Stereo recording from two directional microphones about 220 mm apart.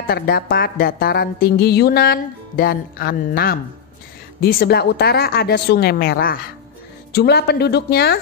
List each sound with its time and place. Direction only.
0.1 s speech: 45° left (ahead or behind)